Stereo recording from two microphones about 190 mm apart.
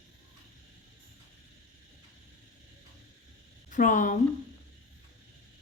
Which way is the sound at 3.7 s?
40° left (ahead or behind).